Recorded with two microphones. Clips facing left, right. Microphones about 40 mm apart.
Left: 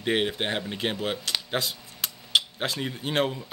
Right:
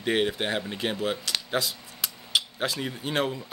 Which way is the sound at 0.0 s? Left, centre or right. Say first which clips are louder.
Even; centre.